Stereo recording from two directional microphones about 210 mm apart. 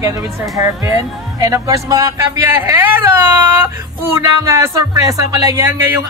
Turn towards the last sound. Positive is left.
turn(degrees=-10)  # may be behind; listen again after turning